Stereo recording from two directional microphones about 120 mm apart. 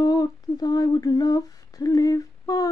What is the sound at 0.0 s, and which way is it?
Humming, 30° left (ahead or behind).